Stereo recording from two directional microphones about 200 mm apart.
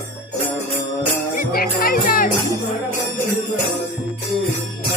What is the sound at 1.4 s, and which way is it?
Music, 45° left (ahead or behind).